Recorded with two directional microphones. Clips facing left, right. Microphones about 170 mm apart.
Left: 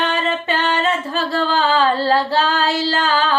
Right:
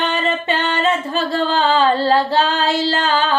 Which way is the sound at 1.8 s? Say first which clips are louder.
Right 1 dB; 5° left (ahead or behind).